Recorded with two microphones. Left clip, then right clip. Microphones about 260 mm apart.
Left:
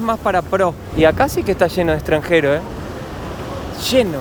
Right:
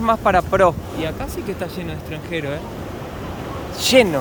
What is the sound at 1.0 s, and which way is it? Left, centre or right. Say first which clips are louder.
Speech: left 12 dB; centre.